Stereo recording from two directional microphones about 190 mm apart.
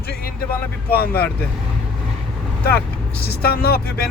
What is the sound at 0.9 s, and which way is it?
Speech, 55° left (ahead or behind).